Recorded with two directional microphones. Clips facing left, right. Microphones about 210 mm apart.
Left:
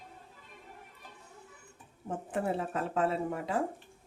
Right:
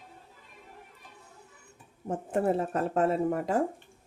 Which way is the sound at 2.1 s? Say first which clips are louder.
Right 6 dB; 45° right (ahead or behind).